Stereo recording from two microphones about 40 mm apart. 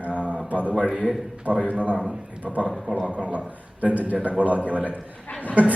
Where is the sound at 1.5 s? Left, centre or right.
Right.